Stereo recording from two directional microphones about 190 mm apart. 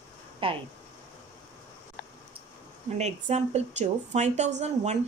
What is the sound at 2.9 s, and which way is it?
Speech, 35° right (ahead or behind).